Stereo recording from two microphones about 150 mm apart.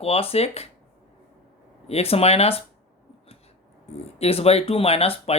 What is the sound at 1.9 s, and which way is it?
Speech, 40° left (ahead or behind).